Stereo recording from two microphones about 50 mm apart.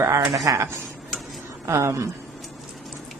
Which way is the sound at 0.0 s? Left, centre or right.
Right.